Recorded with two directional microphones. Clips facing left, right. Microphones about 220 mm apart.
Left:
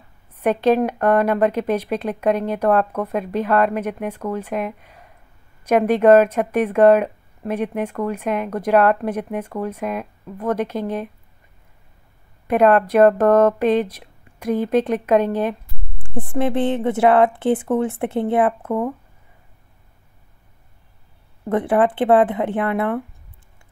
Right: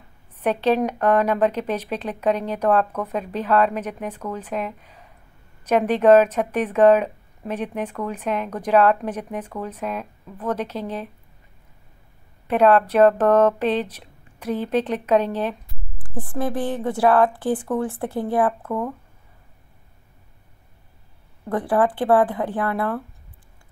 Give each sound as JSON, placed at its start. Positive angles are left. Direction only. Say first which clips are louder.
{"t": 0.4, "sound": "speech", "louder": "left 3 dB", "side_deg": 10}
{"t": 12.4, "sound": "speech", "louder": "left 2 dB", "side_deg": 10}
{"t": 16.0, "sound": "speech", "louder": "left 4 dB", "side_deg": 25}
{"t": 21.5, "sound": "speech", "louder": "left 3 dB", "side_deg": 20}